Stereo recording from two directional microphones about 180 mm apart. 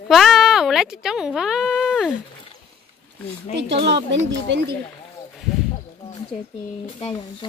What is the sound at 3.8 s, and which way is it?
Speech, 75° right (ahead or behind).